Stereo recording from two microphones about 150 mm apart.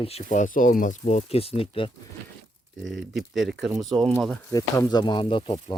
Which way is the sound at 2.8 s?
Centre (ahead or behind).